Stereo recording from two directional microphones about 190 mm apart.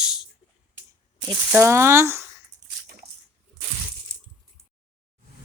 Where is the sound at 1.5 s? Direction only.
15° right (ahead or behind).